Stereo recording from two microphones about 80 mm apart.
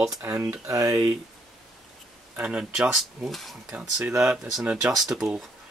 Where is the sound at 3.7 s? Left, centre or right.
Centre.